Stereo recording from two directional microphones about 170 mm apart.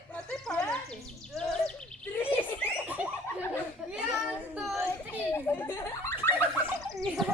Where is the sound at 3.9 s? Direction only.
5° right (ahead or behind).